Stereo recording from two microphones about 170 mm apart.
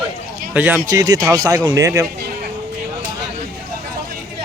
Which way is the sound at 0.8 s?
20° right (ahead or behind).